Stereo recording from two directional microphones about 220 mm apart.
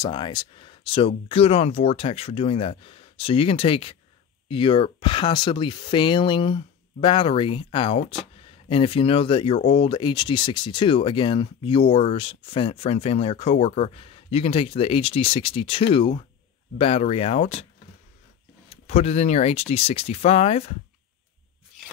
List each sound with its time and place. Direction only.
0.0 s speech: 20° left (ahead or behind)
18.9 s speech: 30° left (ahead or behind)